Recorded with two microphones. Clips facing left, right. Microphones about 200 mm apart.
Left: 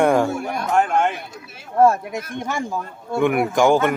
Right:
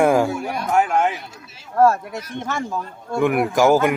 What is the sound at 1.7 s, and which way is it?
A man's voice, 15° left (ahead or behind).